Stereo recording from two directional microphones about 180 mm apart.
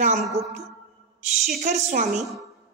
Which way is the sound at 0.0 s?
40° right (ahead or behind).